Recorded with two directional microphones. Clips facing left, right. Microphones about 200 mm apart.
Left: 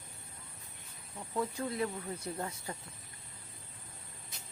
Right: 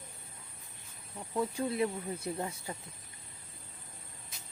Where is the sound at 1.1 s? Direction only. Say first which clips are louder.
Right 2 dB; 10° right (ahead or behind).